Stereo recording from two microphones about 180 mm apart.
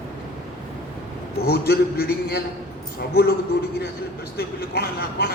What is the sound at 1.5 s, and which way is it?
Speech, 60° left (ahead or behind).